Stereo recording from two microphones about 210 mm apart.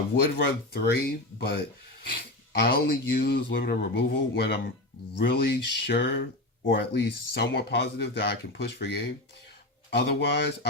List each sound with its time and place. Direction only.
0.3 s speech: 50° left (ahead or behind)